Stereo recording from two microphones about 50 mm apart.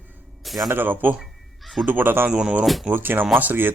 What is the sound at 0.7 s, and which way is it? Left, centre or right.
Speech, right.